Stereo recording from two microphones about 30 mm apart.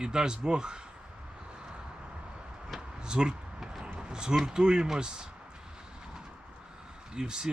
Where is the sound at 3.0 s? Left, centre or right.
Right.